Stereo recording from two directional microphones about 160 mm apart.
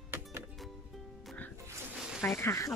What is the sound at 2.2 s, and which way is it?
Speech, 15° left (ahead or behind).